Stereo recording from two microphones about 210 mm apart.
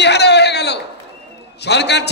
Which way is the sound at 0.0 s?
55° left (ahead or behind).